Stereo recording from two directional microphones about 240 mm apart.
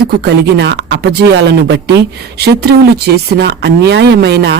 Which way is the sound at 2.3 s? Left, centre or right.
Right.